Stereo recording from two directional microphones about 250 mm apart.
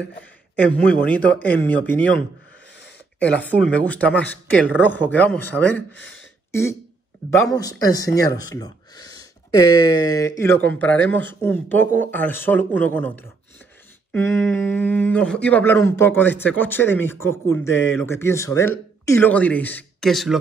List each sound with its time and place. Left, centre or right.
0.6 s speech: centre
3.3 s speech: centre
10.5 s a man's voice: right
12.0 s speech: centre